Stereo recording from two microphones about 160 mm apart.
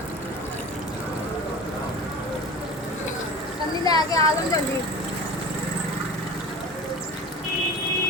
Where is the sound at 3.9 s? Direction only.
25° left (ahead or behind).